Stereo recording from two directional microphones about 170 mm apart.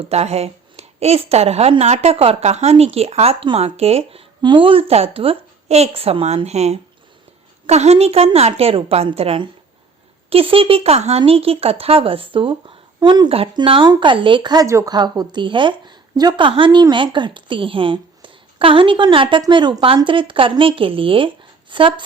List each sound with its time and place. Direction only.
0.1 s a woman's voice: 40° right (ahead or behind)